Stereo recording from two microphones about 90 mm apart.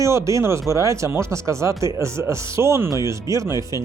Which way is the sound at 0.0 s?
35° right (ahead or behind).